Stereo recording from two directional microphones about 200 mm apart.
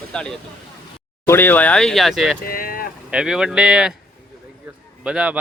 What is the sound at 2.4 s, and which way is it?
Vehicle, 45° left (ahead or behind).